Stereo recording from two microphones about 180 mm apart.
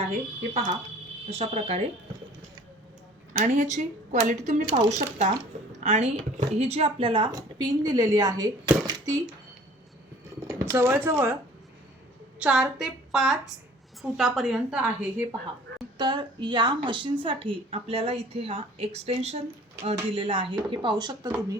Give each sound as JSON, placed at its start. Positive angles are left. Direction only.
{"t": 1.3, "sound": "a woman's voice", "side_deg": -35}
{"t": 3.3, "sound": "a woman's voice", "side_deg": -45}
{"t": 10.4, "sound": "speech", "side_deg": -15}
{"t": 12.4, "sound": "a woman's voice", "side_deg": -5}
{"t": 16.0, "sound": "a woman's voice", "side_deg": -25}